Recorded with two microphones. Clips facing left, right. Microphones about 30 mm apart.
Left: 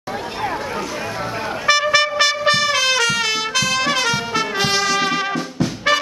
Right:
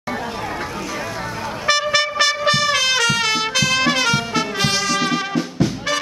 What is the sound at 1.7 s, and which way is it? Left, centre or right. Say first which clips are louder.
Music: left 2 dB; centre.